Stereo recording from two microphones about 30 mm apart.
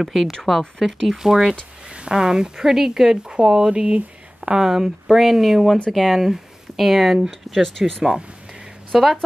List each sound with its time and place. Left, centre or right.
0.0 s speech: centre
0.3 s speech: centre
0.8 s speech: centre
1.9 s speech: right
2.6 s speech: centre
3.3 s speech: right; by 6.1 s centre
6.1 s speech: centre
8.9 s speech: centre